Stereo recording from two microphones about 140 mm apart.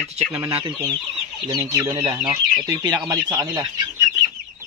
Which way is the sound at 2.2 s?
30° right (ahead or behind).